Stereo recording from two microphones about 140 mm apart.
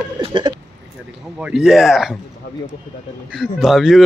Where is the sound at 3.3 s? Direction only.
Centre (ahead or behind).